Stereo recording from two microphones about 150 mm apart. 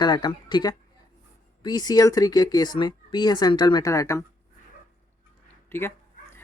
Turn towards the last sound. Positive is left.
turn(degrees=15)  # may be behind; listen again after turning